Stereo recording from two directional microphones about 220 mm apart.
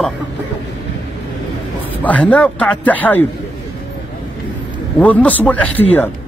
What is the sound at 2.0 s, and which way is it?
Speech, 5° left (ahead or behind).